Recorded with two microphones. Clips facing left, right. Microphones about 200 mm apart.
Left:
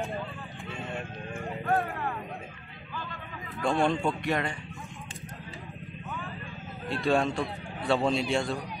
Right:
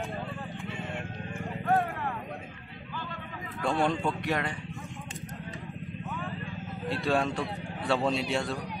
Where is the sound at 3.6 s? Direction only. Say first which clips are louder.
Left 2 dB; centre (ahead or behind).